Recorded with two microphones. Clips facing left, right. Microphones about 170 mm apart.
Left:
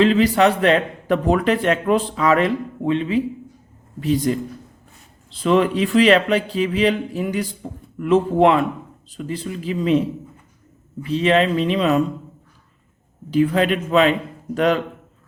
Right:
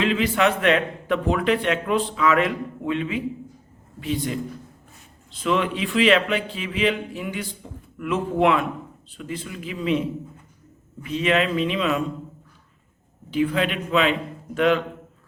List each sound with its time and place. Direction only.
0.0 s a man's voice: 35° left (ahead or behind)
11.0 s a man's voice: 35° left (ahead or behind)
13.3 s a man's voice: 40° left (ahead or behind)